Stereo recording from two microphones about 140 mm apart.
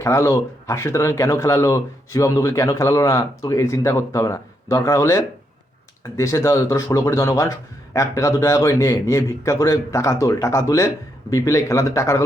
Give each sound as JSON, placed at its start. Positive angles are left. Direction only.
{"t": 0.0, "sound": "speech", "side_deg": 20}